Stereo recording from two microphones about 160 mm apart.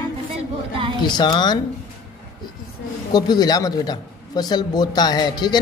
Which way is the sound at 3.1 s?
25° left (ahead or behind).